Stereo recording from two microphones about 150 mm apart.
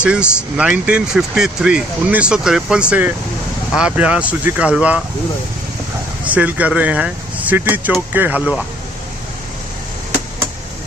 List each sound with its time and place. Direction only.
0.0 s speech: 5° right (ahead or behind)
6.2 s speech: 10° right (ahead or behind)